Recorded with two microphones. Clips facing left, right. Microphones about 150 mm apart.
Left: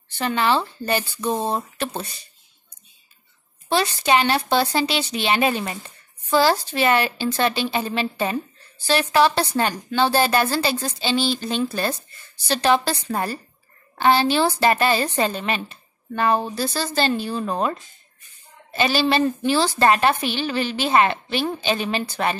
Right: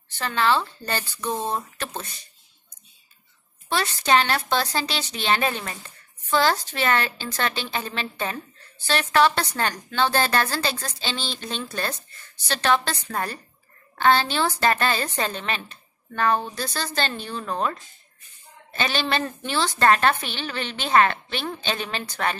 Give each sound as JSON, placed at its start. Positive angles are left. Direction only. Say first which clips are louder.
{"t": 0.2, "sound": "a woman's voice", "louder": "left 2 dB", "side_deg": 15}
{"t": 3.7, "sound": "a woman's voice", "louder": "left 2 dB", "side_deg": 15}
{"t": 14.0, "sound": "a woman's voice", "louder": "left 3 dB", "side_deg": 10}
{"t": 19.2, "sound": "a woman's voice", "louder": "left 6 dB", "side_deg": 10}